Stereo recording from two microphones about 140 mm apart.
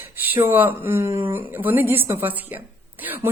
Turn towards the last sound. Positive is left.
turn(degrees=-15)  # may be behind; listen again after turning